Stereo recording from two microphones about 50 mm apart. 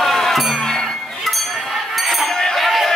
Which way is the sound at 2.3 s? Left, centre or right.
Centre.